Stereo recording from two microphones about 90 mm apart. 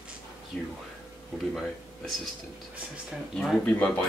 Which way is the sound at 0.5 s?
15° left (ahead or behind).